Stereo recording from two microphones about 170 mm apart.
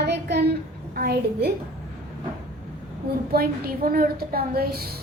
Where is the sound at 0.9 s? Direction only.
65° right (ahead or behind).